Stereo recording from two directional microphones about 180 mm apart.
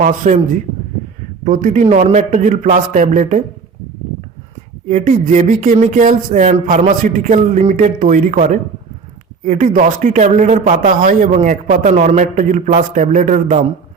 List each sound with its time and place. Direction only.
0.0 s a man's voice: 45° right (ahead or behind)
1.5 s a man's voice: 45° right (ahead or behind)
4.9 s a man's voice: 45° right (ahead or behind)